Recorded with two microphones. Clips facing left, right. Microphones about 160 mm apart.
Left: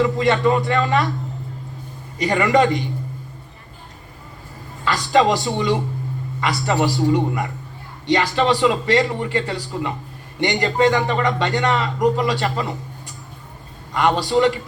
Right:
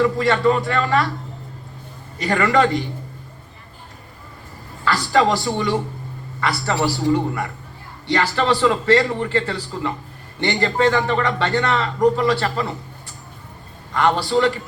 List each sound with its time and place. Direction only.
0.0 s speech: 20° left (ahead or behind)
2.1 s a man's voice: 15° left (ahead or behind)
4.9 s a man's voice: 20° left (ahead or behind)
13.9 s a man's voice: 15° left (ahead or behind)